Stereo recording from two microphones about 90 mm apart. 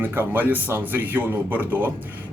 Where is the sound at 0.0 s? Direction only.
25° right (ahead or behind).